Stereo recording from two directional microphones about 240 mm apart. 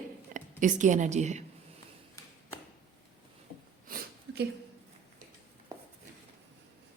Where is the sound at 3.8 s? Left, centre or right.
Right.